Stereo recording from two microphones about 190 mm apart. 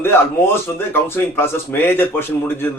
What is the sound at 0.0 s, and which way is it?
Speech, 10° left (ahead or behind).